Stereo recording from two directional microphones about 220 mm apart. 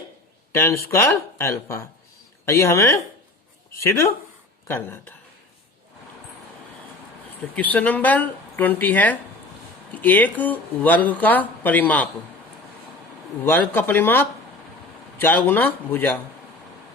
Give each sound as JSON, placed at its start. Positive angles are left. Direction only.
{"t": 0.5, "sound": "speech", "side_deg": 10}
{"t": 7.5, "sound": "speech", "side_deg": 5}
{"t": 13.4, "sound": "speech", "side_deg": 10}